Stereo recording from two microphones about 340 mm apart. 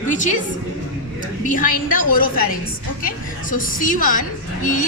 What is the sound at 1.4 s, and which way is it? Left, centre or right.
A woman's voice, left.